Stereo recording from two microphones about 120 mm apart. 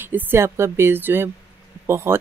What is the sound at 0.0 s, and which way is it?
Speech, 20° right (ahead or behind).